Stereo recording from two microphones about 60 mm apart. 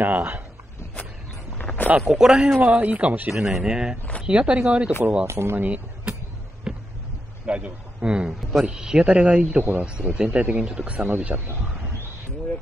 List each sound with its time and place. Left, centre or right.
0.0 s speech: right
1.6 s a sound: left
2.0 s speech: centre
2.6 s speech: right
3.3 s speech: centre
5.2 s speech: right
5.6 s speech: right
6.7 s a sound: centre
7.4 s a man's voice: centre
8.4 s speech: centre
8.6 s speech: centre